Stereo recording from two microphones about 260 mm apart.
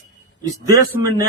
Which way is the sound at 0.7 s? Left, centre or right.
Centre.